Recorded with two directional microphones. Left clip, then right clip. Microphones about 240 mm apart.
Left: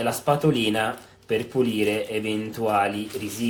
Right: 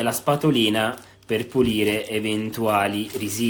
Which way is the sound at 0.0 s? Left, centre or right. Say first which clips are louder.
Right 1 dB; right.